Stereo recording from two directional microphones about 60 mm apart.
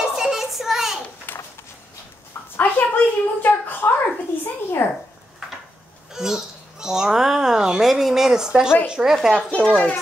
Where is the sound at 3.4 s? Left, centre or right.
Left.